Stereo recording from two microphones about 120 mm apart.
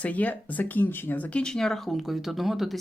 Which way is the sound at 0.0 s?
15° left (ahead or behind).